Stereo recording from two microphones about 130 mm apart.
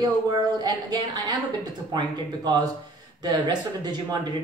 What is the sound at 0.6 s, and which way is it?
Speech, 30° right (ahead or behind).